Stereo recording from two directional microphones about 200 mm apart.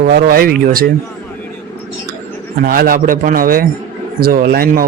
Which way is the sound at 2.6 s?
50° right (ahead or behind).